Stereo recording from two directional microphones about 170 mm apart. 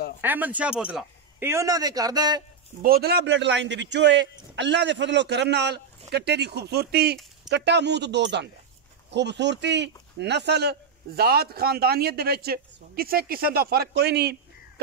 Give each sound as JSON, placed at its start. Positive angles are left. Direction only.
{"t": 0.2, "sound": "speech", "side_deg": -10}
{"t": 2.8, "sound": "a man's voice", "side_deg": -65}
{"t": 7.4, "sound": "a man's voice", "side_deg": -90}